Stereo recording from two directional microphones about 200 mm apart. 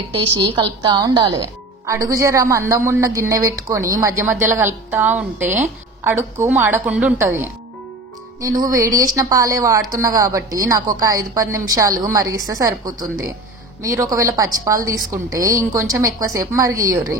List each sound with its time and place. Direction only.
0.8 s a woman's voice: 20° right (ahead or behind)